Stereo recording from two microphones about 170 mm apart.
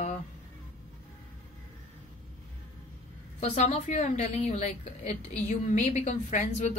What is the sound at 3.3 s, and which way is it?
A woman's voice, 40° left (ahead or behind).